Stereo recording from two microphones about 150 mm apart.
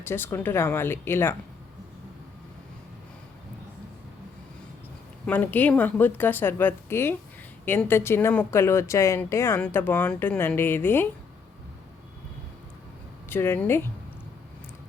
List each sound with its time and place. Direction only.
0.0 s a woman's voice: 15° left (ahead or behind)
5.2 s a woman's voice: 10° left (ahead or behind)
13.3 s a woman's voice: 15° left (ahead or behind)